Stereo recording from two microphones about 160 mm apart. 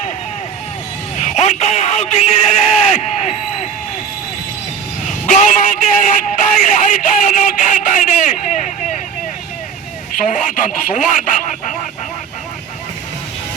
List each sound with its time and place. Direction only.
1.1 s a sound: 45° left (ahead or behind)
5.2 s speech: 50° left (ahead or behind)
10.2 s speech: 55° left (ahead or behind)